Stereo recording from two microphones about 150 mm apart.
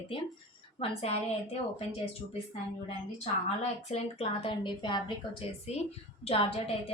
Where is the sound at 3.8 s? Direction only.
40° left (ahead or behind).